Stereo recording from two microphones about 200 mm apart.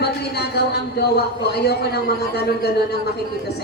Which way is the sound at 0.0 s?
55° left (ahead or behind).